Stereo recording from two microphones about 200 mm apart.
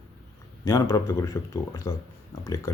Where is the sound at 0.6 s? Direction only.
15° left (ahead or behind).